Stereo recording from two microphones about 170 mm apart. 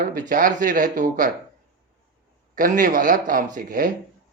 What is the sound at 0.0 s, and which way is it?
Speech, 55° right (ahead or behind).